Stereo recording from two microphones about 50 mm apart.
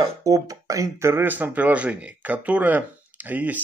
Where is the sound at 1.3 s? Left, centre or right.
Right.